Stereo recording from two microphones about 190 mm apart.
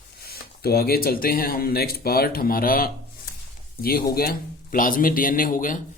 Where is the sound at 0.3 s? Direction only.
55° left (ahead or behind).